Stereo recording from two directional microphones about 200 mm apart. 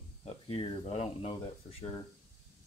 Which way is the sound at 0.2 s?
30° left (ahead or behind).